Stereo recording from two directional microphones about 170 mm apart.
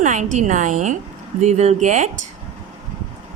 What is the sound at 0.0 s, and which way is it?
Speech, 45° right (ahead or behind).